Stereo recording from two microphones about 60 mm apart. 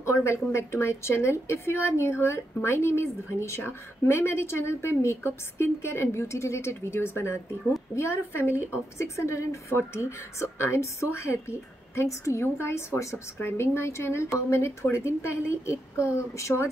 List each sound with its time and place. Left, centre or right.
0.0 s a woman's voice: left